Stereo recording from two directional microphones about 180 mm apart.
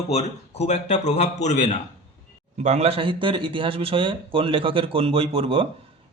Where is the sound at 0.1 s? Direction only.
35° left (ahead or behind).